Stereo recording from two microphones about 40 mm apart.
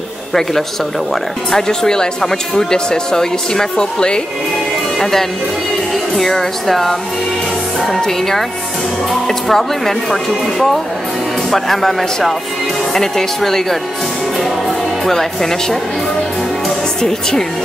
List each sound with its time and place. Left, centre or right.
0.3 s speech: centre
6.1 s speech: centre
11.5 s speech: centre
17.0 s speech: centre